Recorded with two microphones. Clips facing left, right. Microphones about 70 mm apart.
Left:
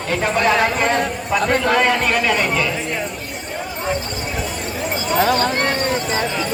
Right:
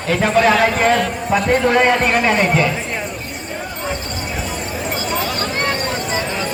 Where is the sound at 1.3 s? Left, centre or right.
Right.